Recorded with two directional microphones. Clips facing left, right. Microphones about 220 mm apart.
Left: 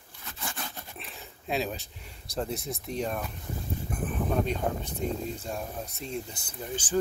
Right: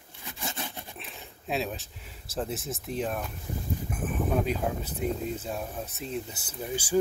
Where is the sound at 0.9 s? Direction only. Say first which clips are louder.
Even; centre (ahead or behind).